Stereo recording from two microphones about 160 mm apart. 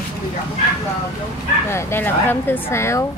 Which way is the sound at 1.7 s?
15° left (ahead or behind).